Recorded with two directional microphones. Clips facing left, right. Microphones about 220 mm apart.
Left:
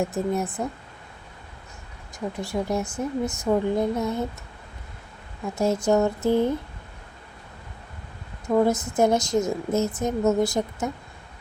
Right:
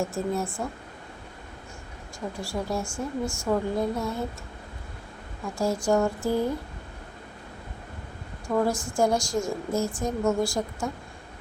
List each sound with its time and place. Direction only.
0.0 s a woman's voice: 20° left (ahead or behind)
2.1 s a woman's voice: 20° left (ahead or behind)
5.5 s a woman's voice: 20° left (ahead or behind)
8.4 s a woman's voice: 20° left (ahead or behind)